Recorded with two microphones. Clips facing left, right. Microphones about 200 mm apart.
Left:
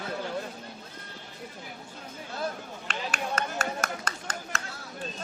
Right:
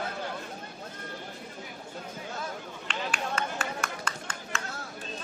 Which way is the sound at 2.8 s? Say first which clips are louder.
Even; 40° left (ahead or behind).